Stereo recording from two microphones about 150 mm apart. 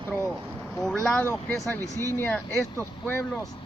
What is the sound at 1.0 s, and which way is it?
Speech, 15° left (ahead or behind).